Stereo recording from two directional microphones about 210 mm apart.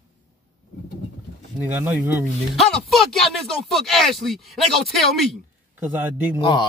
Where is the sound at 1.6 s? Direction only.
10° right (ahead or behind).